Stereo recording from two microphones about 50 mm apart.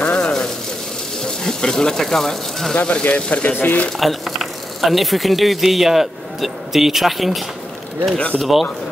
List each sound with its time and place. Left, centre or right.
0.0 s a sound: centre
1.2 s speech: centre
2.7 s speech: left
4.0 s speech: centre